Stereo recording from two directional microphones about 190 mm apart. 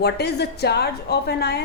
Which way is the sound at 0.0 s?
60° left (ahead or behind).